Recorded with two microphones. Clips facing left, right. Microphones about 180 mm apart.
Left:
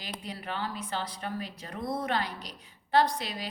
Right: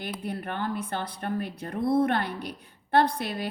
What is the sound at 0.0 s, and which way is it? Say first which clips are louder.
A woman's voice: right 6 dB; 55° right (ahead or behind).